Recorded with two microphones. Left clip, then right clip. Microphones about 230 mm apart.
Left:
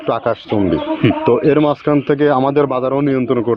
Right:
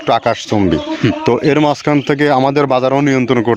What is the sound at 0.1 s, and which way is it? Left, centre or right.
A man's voice, right.